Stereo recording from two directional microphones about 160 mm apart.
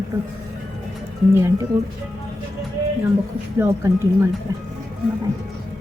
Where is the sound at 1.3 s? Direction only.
15° right (ahead or behind).